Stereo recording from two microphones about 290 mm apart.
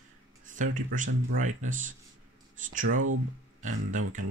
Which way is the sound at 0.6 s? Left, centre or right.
Right.